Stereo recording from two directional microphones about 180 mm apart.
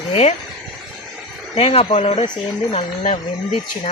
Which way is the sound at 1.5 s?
35° left (ahead or behind).